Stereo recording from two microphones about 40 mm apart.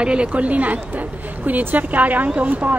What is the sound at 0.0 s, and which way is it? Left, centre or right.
Speech, right.